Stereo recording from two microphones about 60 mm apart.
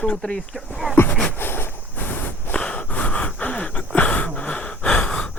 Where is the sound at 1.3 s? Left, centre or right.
Left.